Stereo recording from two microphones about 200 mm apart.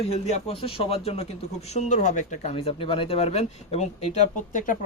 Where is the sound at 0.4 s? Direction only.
30° left (ahead or behind).